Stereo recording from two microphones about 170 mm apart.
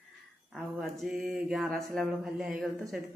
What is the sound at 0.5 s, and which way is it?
Mantra, centre (ahead or behind).